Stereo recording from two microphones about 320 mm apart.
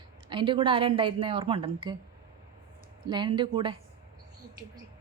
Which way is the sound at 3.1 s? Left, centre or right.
Centre.